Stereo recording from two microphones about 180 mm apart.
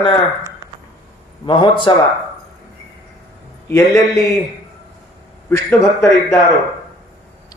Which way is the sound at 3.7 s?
15° left (ahead or behind).